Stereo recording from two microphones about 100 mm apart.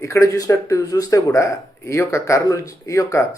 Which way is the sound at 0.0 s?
30° left (ahead or behind).